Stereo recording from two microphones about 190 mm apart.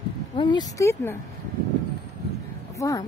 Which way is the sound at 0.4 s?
20° left (ahead or behind).